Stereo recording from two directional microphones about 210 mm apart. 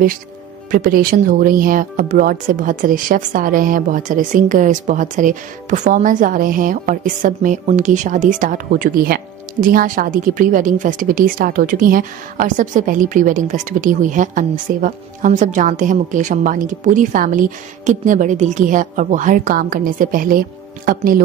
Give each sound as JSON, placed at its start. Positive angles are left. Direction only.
{"t": 0.7, "sound": "speech", "side_deg": -40}